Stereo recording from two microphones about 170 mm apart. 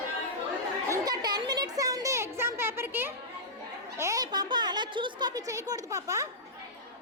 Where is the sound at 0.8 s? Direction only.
20° right (ahead or behind).